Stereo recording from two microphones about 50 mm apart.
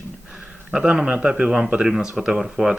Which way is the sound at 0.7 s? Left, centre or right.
Centre.